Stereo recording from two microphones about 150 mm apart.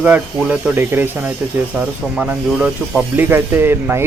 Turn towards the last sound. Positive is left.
turn(degrees=-15)  # may be behind; listen again after turning